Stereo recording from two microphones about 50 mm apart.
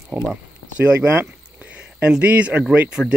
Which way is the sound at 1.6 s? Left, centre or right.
Right.